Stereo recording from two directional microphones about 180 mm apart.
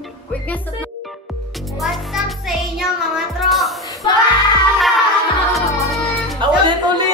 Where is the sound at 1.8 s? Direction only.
Centre (ahead or behind).